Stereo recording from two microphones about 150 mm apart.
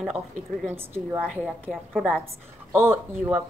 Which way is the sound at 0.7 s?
15° right (ahead or behind).